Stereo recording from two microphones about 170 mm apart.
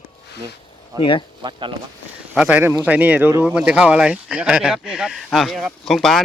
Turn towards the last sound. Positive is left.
turn(degrees=0)  # may be behind; listen again after turning